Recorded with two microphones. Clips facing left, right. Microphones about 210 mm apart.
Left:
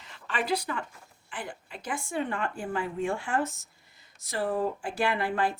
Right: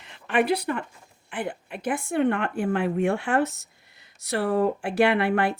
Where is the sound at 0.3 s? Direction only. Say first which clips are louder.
Right 7 dB; 60° right (ahead or behind).